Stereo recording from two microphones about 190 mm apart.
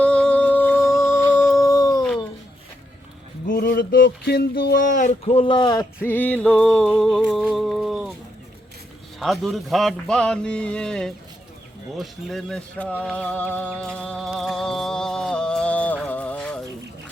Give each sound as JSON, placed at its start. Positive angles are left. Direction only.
{"t": 0.0, "sound": "music", "side_deg": 5}
{"t": 1.6, "sound": "dog", "side_deg": 20}
{"t": 3.4, "sound": "speech", "side_deg": 45}
{"t": 6.1, "sound": "music", "side_deg": 10}
{"t": 9.1, "sound": "music", "side_deg": 0}
{"t": 11.9, "sound": "speech", "side_deg": 0}
{"t": 13.7, "sound": "music", "side_deg": 5}